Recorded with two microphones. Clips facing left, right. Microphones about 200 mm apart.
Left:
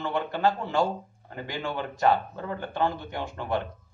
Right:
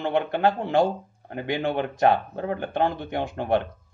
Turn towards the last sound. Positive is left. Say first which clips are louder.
# right 6 dB
turn(degrees=-60)  # may be behind; listen again after turning